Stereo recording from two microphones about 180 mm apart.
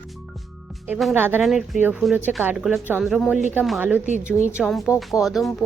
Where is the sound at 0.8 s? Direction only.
10° right (ahead or behind).